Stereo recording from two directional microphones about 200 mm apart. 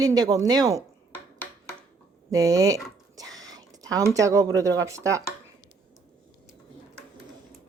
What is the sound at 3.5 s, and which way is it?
Speech, 20° right (ahead or behind).